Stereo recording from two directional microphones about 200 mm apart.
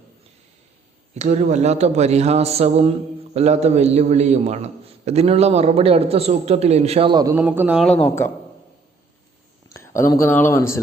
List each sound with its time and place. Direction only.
1.1 s a man's voice: 35° right (ahead or behind)
7.3 s speech: 10° right (ahead or behind); by 8.3 s 10° left (ahead or behind)
9.6 s speech: 15° left (ahead or behind)